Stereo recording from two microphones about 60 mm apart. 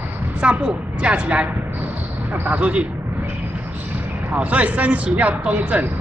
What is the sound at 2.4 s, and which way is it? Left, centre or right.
Speech, right.